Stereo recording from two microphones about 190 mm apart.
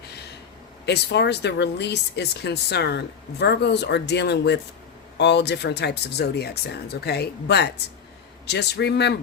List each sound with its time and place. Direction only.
0.9 s speech: 60° left (ahead or behind)